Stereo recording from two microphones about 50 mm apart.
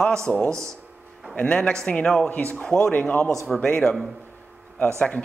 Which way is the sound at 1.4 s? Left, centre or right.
Centre.